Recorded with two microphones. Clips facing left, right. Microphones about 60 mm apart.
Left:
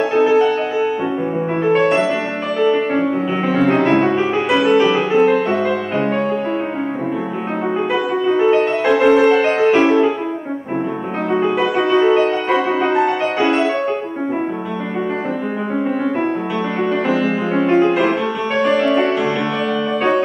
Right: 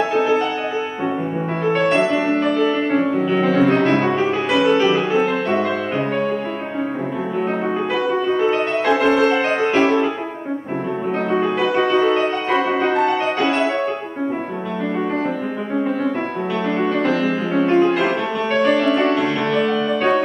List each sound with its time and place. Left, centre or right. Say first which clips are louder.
0.1 s music: left 4 dB; centre
1.6 s music: left 2 dB; centre
7.9 s music: left 2 dB; centre
11.3 s music: left 2 dB; centre
17.1 s music: left 2 dB; left
17.6 s music: left 2 dB; centre
20.0 s music: left 2 dB; centre